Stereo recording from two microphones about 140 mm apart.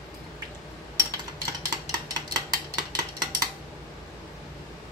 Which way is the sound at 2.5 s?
30° right (ahead or behind).